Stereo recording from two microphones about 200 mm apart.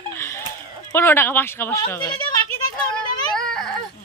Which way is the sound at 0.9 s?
10° left (ahead or behind).